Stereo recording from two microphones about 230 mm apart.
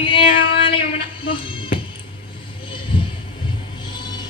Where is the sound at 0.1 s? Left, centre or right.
Left.